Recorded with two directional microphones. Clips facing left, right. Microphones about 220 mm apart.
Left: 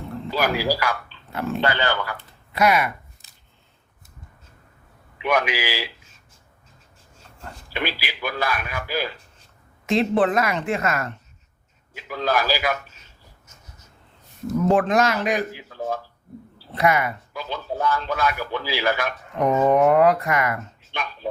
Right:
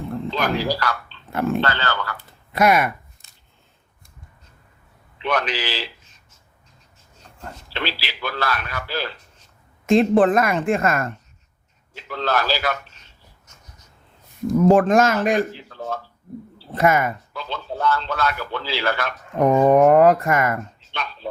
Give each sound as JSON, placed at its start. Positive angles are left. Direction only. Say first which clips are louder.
{"t": 0.3, "sound": "a man's voice", "louder": "left 1 dB", "side_deg": 10}
{"t": 2.5, "sound": "speech", "louder": "right 2 dB", "side_deg": -50}
{"t": 5.1, "sound": "a man's voice", "louder": "left 1 dB", "side_deg": 10}
{"t": 7.7, "sound": "a man's voice", "louder": "left 1 dB", "side_deg": 15}
{"t": 9.8, "sound": "speech", "louder": "right 5 dB", "side_deg": -50}
{"t": 11.9, "sound": "a man's voice", "louder": "even", "side_deg": 10}
{"t": 14.7, "sound": "speech", "louder": "right 3 dB", "side_deg": -45}
{"t": 16.7, "sound": "speech", "louder": "right 2 dB", "side_deg": -45}
{"t": 17.3, "sound": "a man's voice", "louder": "left 1 dB", "side_deg": 15}
{"t": 19.4, "sound": "speech", "louder": "right 3 dB", "side_deg": -50}
{"t": 20.9, "sound": "speech", "louder": "even", "side_deg": 15}